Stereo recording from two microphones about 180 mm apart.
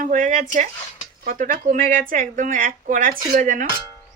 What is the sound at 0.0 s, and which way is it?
Speech, 45° right (ahead or behind).